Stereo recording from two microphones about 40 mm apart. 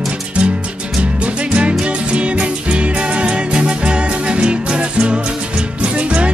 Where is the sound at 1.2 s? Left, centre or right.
Right.